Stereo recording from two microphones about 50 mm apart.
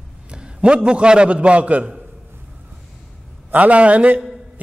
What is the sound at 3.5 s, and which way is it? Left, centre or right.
Speech, right.